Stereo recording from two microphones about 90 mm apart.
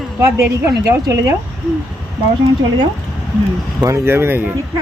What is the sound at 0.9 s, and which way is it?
Speech, 35° right (ahead or behind).